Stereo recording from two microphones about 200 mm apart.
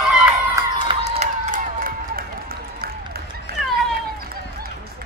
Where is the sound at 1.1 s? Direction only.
35° right (ahead or behind).